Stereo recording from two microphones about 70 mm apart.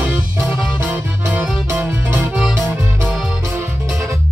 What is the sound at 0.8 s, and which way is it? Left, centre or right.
Music, right.